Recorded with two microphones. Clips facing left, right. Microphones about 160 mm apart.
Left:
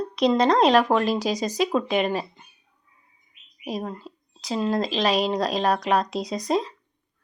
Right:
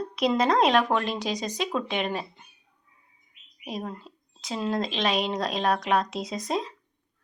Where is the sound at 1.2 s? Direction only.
40° left (ahead or behind).